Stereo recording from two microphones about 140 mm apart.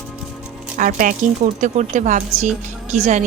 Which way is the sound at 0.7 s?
75° right (ahead or behind).